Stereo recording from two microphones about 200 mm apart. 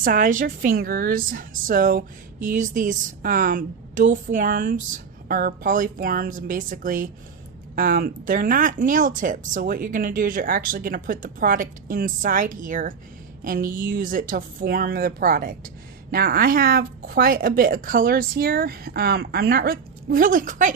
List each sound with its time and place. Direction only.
0.0 s a woman's voice: 45° right (ahead or behind)